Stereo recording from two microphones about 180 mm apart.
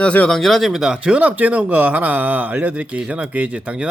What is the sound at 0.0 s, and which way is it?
Speech, 5° left (ahead or behind).